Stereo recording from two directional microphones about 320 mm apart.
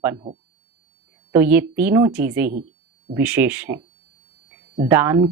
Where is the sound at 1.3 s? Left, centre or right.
Centre.